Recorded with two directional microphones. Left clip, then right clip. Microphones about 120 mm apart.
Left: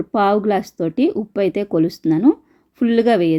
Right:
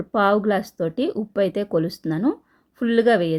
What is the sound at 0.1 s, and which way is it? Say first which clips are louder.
Speech: left 2 dB; 30° left (ahead or behind).